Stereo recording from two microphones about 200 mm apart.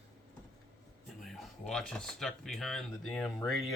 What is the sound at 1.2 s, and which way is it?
Speech, centre (ahead or behind).